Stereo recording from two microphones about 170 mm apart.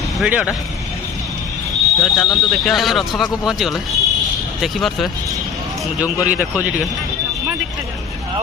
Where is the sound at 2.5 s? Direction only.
Centre (ahead or behind).